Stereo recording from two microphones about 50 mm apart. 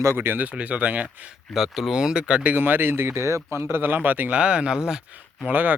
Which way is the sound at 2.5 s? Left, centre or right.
Right.